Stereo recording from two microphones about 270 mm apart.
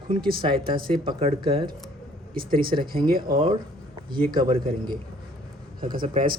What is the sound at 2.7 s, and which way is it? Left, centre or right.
Speech, right.